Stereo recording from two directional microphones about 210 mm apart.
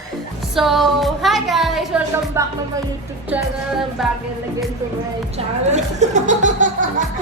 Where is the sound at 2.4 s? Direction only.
10° right (ahead or behind).